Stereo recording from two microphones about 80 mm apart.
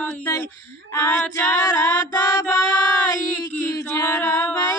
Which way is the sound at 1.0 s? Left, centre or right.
Left.